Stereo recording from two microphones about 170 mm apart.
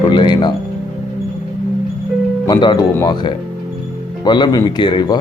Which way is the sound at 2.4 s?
25° left (ahead or behind).